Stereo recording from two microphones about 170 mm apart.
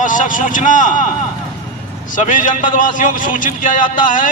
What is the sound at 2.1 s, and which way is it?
A man's voice, 50° left (ahead or behind).